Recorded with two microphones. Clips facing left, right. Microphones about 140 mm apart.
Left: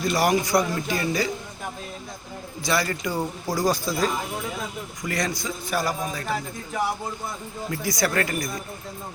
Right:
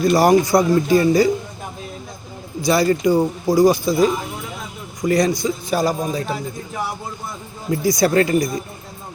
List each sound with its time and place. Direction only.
0.0 s speech: 40° right (ahead or behind)
2.6 s speech: 25° right (ahead or behind)
5.0 s speech: 25° right (ahead or behind)
7.7 s speech: 25° right (ahead or behind)